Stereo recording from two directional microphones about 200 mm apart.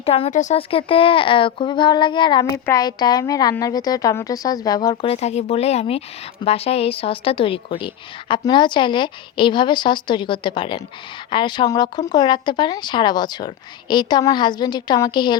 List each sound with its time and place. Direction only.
0.0 s a woman's voice: 30° left (ahead or behind)
5.1 s a woman's voice: 30° left (ahead or behind)